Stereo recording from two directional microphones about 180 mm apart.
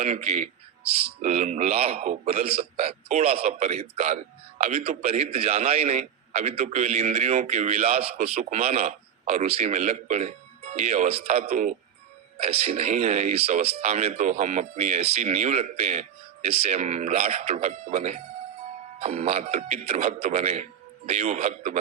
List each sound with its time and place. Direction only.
0.0 s a man's voice: 40° right (ahead or behind)